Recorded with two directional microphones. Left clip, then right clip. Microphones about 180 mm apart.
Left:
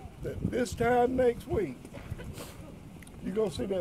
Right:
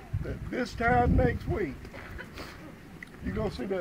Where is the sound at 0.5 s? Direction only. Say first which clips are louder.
Even; 20° left (ahead or behind).